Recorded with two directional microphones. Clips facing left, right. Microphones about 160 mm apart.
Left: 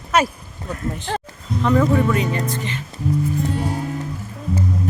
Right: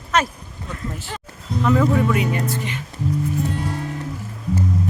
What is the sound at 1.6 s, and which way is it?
Speech, 5° right (ahead or behind).